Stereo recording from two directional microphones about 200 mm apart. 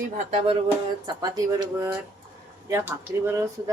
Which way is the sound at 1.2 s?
20° right (ahead or behind).